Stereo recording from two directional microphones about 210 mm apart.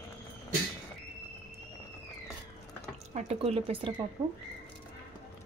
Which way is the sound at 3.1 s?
30° right (ahead or behind).